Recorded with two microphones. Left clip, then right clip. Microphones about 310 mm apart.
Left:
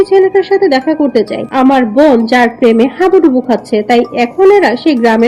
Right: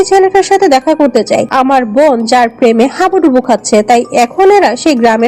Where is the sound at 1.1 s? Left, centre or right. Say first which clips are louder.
Right 3 dB; right.